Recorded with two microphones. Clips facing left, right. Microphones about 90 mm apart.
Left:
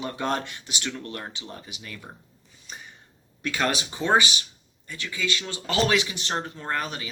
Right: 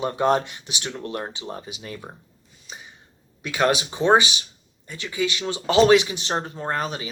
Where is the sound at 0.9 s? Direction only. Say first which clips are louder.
Right 5 dB; 30° right (ahead or behind).